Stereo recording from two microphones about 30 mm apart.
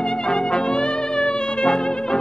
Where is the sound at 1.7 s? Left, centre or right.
Left.